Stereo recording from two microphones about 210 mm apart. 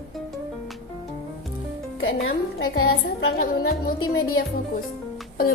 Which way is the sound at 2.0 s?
70° left (ahead or behind).